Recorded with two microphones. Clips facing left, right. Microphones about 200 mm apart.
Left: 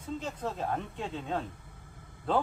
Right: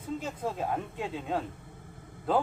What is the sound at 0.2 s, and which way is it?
Speech, 10° right (ahead or behind).